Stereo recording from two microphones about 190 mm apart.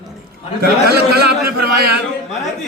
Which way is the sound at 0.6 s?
55° right (ahead or behind).